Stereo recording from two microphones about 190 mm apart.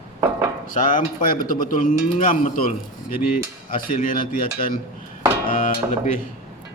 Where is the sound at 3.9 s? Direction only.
45° left (ahead or behind).